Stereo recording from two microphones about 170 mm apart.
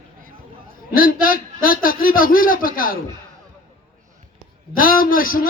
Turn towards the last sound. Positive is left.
turn(degrees=55)  # may be behind; listen again after turning